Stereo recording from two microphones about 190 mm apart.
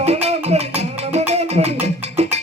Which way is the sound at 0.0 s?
35° right (ahead or behind).